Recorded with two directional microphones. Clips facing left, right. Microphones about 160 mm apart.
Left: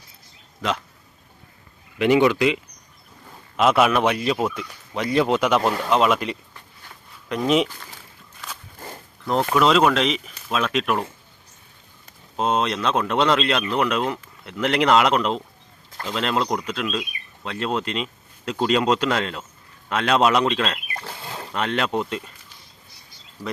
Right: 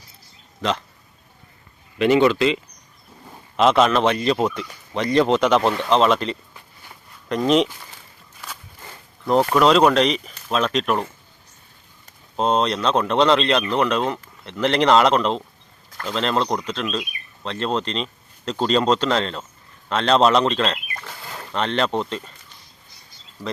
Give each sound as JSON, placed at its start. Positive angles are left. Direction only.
{"t": 2.0, "sound": "speech", "side_deg": 15}
{"t": 3.6, "sound": "speech", "side_deg": 5}
{"t": 9.2, "sound": "speech", "side_deg": 0}
{"t": 12.4, "sound": "speech", "side_deg": 5}
{"t": 20.9, "sound": "pig", "side_deg": 30}
{"t": 21.5, "sound": "speech", "side_deg": 5}